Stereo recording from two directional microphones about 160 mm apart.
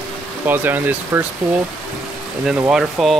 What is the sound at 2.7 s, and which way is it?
Speech, centre (ahead or behind).